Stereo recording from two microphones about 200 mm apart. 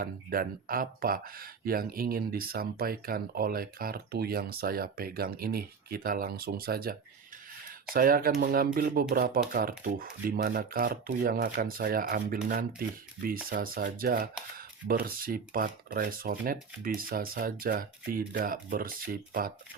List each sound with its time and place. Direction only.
0.0 s speech: 45° right (ahead or behind)
7.9 s speech: 45° right (ahead or behind)